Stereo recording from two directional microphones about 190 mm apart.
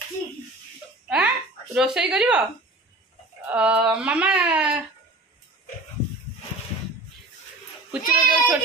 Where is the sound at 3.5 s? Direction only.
5° right (ahead or behind).